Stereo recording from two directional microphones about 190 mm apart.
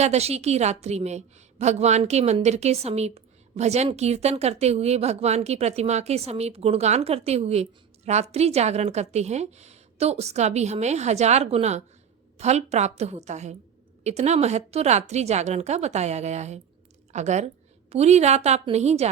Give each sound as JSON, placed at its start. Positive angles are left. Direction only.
{"t": 0.0, "sound": "a woman's voice", "side_deg": -35}